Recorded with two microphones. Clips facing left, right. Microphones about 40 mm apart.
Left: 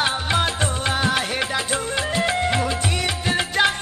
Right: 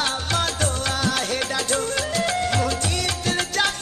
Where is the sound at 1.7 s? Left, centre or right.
Left.